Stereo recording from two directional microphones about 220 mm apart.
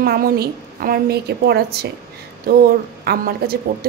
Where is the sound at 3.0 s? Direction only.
45° right (ahead or behind).